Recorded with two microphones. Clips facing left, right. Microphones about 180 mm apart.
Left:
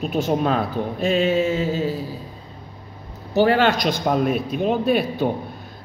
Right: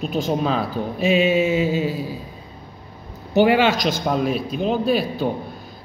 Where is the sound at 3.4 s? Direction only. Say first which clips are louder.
Right 1 dB; 10° right (ahead or behind).